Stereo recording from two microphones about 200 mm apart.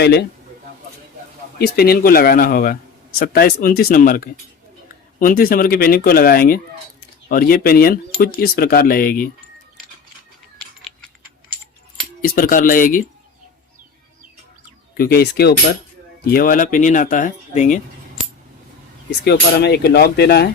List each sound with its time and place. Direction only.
0.0 s speech: 55° left (ahead or behind)
1.5 s speech: 50° left (ahead or behind)
12.2 s speech: 45° left (ahead or behind)
14.9 s speech: 50° left (ahead or behind)
19.2 s speech: 55° left (ahead or behind)